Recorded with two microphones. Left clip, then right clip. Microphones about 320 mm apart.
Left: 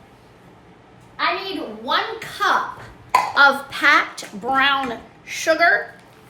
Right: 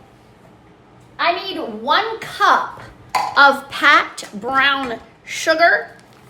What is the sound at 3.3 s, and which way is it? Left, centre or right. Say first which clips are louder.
A woman's voice: right 5 dB; centre.